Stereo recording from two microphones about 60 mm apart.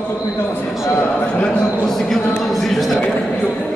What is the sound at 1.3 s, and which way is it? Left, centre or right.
A man's voice, centre.